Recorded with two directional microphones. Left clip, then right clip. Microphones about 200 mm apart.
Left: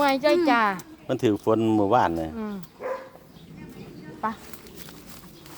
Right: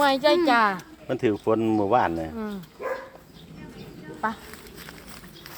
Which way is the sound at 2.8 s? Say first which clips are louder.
Right 1 dB; 45° right (ahead or behind).